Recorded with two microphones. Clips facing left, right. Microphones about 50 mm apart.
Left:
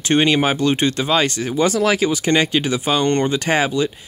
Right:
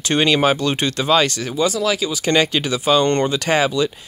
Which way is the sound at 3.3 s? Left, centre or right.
Left.